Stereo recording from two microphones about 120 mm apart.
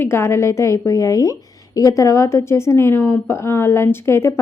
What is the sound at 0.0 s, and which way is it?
A woman's voice, 20° left (ahead or behind).